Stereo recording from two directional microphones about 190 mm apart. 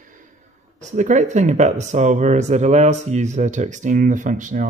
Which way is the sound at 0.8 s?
40° right (ahead or behind).